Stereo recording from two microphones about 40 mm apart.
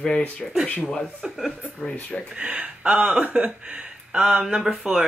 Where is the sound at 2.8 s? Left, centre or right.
Right.